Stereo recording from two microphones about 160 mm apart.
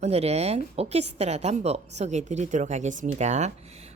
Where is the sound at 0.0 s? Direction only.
40° right (ahead or behind).